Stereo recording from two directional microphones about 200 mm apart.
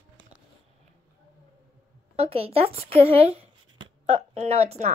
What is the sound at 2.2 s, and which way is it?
Speech, 30° right (ahead or behind).